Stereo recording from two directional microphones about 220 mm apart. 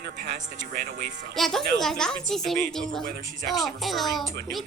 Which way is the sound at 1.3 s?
Centre (ahead or behind).